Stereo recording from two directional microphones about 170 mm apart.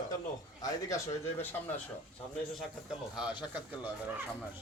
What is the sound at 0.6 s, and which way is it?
Speech, 20° left (ahead or behind).